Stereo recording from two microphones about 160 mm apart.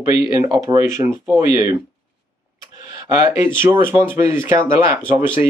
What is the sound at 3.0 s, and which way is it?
Speech, 20° right (ahead or behind).